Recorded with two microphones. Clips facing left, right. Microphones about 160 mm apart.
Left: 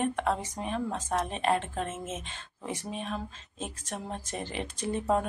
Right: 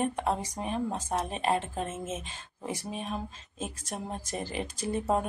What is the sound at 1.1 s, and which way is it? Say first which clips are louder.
Speech: left 2 dB; 30° right (ahead or behind).